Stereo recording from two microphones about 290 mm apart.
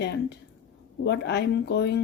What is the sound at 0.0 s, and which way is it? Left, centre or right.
Speech, left.